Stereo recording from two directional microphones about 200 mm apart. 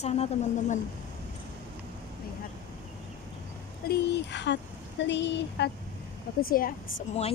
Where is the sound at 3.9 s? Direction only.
55° left (ahead or behind).